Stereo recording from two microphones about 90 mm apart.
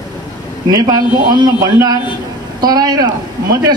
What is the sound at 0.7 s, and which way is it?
A man's voice, 50° right (ahead or behind).